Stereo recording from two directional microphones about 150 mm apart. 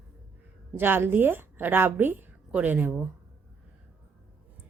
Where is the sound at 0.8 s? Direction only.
15° right (ahead or behind).